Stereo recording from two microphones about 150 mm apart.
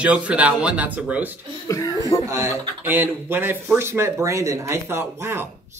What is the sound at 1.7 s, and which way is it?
Speech, 25° left (ahead or behind).